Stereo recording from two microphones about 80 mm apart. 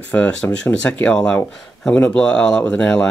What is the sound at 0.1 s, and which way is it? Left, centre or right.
Speech, centre.